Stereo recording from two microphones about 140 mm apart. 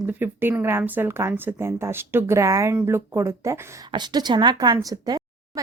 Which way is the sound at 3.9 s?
30° right (ahead or behind).